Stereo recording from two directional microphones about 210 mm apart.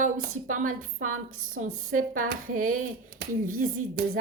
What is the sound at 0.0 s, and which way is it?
Speech, 40° right (ahead or behind).